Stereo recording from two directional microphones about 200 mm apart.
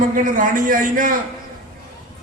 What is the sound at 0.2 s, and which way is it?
A man's voice, 40° right (ahead or behind).